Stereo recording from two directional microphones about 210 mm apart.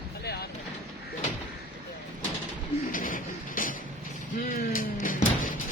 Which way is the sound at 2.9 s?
40° left (ahead or behind).